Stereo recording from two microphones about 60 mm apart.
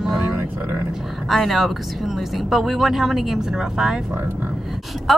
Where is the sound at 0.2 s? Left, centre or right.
Right.